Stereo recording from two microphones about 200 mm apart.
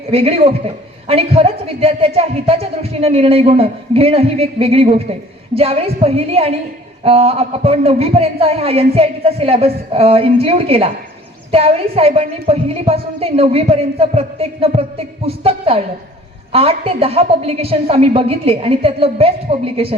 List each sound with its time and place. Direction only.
0.1 s a woman's voice: 30° right (ahead or behind)